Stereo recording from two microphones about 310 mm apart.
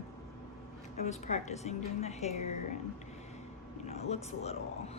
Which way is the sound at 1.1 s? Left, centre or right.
Left.